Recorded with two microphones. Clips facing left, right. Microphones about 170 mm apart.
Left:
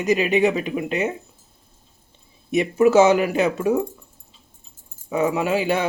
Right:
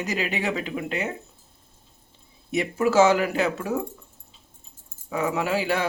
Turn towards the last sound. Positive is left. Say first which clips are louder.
# left 4 dB
turn(degrees=20)  # may be behind; listen again after turning